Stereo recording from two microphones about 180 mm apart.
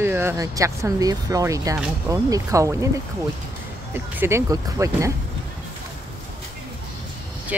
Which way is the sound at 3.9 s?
15° right (ahead or behind).